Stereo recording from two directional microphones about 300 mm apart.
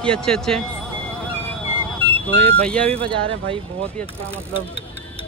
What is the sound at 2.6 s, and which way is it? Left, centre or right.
Speech, centre.